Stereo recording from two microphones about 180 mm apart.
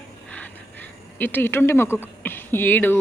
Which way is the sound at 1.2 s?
10° left (ahead or behind).